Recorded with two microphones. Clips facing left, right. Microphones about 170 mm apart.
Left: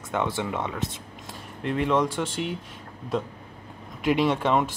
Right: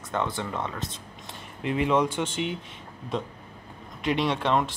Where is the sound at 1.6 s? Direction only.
5° right (ahead or behind).